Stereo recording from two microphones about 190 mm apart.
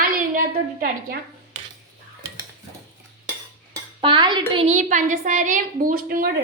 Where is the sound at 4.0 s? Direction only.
25° right (ahead or behind).